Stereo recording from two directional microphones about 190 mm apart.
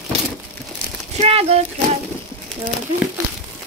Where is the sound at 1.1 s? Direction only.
30° right (ahead or behind).